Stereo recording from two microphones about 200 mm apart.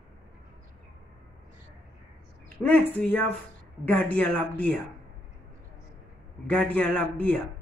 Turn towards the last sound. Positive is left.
turn(degrees=5)  # may be behind; listen again after turning